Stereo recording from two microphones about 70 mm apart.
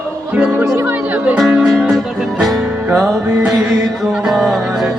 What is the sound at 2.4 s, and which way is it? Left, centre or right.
Music, centre.